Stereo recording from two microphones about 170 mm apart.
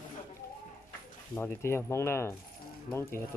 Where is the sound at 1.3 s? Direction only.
10° left (ahead or behind).